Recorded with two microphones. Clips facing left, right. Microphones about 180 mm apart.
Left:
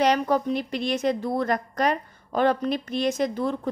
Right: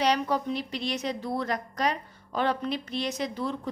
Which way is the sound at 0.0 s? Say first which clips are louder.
Left 4 dB; 50° left (ahead or behind).